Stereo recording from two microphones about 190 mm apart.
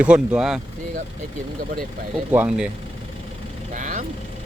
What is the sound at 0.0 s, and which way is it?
Speech, 5° right (ahead or behind).